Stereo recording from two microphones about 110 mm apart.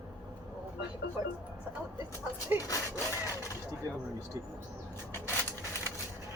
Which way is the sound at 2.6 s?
30° left (ahead or behind).